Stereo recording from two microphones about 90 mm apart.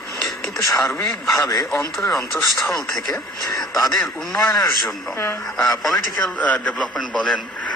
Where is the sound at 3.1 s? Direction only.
40° left (ahead or behind).